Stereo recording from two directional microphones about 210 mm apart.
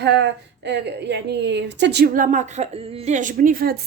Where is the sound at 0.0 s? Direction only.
55° right (ahead or behind).